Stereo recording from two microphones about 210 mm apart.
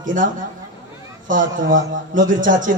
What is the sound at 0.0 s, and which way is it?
Speech, 40° right (ahead or behind).